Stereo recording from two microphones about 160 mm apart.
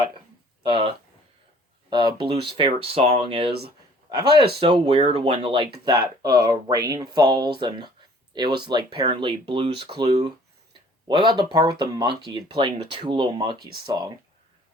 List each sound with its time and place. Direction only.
0.6 s speech: 30° right (ahead or behind)
4.6 s speech: 35° right (ahead or behind)
11.1 s speech: 25° right (ahead or behind)